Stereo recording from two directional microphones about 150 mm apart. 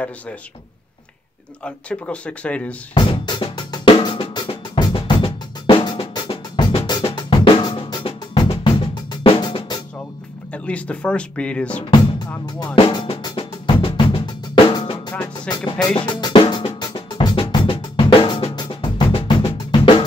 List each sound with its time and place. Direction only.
1.6 s speech: 10° left (ahead or behind)
2.9 s drum: 35° left (ahead or behind)
10.5 s speech: 10° left (ahead or behind)
12.7 s drum: 35° left (ahead or behind)
15.5 s speech: 25° left (ahead or behind)
16.1 s drum: 30° left (ahead or behind)